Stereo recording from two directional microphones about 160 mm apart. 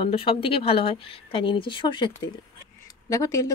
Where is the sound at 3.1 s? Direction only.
20° left (ahead or behind).